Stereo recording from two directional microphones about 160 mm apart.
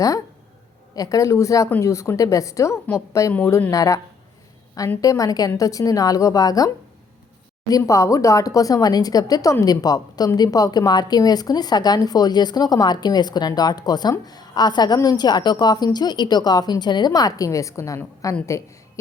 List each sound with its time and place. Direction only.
0.9 s speech: 20° left (ahead or behind)
7.7 s speech: 20° left (ahead or behind)